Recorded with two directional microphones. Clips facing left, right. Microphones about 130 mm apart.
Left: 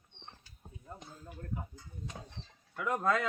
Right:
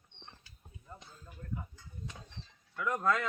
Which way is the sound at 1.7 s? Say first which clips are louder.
Left 2 dB; 40° left (ahead or behind).